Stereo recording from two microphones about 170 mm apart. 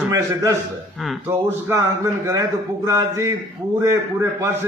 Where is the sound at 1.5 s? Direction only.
10° right (ahead or behind).